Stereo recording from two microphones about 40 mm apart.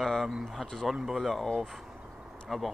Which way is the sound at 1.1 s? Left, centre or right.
Centre.